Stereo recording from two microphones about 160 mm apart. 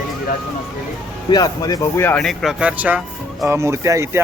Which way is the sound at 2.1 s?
Centre (ahead or behind).